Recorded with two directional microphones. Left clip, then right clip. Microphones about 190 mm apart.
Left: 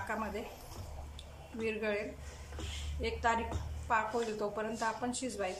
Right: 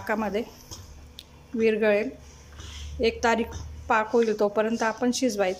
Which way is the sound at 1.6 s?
45° right (ahead or behind).